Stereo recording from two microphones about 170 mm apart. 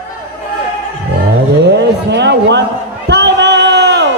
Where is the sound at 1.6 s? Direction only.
90° right.